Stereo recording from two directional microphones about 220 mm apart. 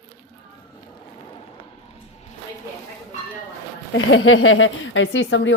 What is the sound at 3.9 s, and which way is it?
Speech, 60° left (ahead or behind).